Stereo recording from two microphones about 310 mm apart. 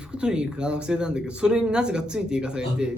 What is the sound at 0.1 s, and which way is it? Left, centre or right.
Speech, centre.